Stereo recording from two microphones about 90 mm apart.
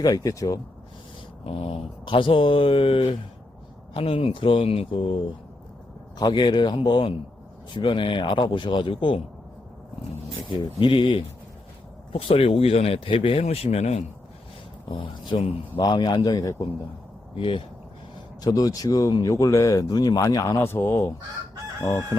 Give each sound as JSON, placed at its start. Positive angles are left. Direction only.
{"t": 0.0, "sound": "a man's voice", "side_deg": 40}
{"t": 1.5, "sound": "speech", "side_deg": 90}
{"t": 6.1, "sound": "speech", "side_deg": 55}
{"t": 10.6, "sound": "speech", "side_deg": 70}
{"t": 12.1, "sound": "speech", "side_deg": 90}
{"t": 14.8, "sound": "speech", "side_deg": 65}
{"t": 15.8, "sound": "a man's voice", "side_deg": 55}
{"t": 17.3, "sound": "speech", "side_deg": 75}
{"t": 18.4, "sound": "a man's voice", "side_deg": 45}
{"t": 20.6, "sound": "speech", "side_deg": 25}
{"t": 21.8, "sound": "chicken", "side_deg": 30}